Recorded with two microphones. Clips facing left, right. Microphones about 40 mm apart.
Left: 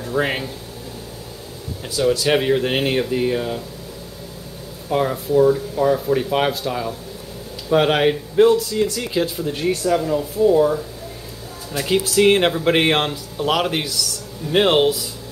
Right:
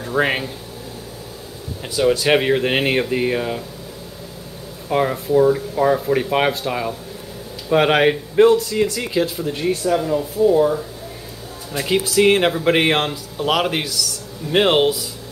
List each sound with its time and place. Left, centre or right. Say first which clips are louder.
0.0 s speech: right 2 dB; right
1.8 s speech: right 2 dB; right
4.8 s speech: right 1 dB; right
9.1 s speech: right 1 dB; centre